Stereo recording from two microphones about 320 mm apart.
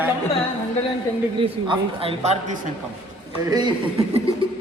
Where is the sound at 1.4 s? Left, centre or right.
Centre.